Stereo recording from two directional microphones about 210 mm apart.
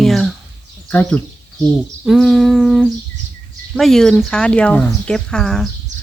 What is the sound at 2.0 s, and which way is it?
Humming, centre (ahead or behind).